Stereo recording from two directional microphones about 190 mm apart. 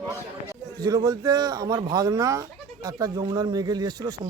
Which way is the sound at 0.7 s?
20° right (ahead or behind).